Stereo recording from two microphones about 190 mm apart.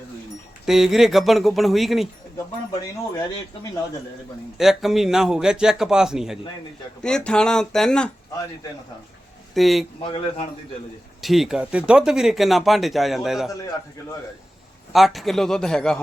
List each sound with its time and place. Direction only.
0.6 s speech: centre (ahead or behind)
4.5 s speech: centre (ahead or behind)
9.6 s speech: centre (ahead or behind)
10.0 s a man's voice: 25° left (ahead or behind)
11.2 s speech: centre (ahead or behind)
14.9 s speech: centre (ahead or behind)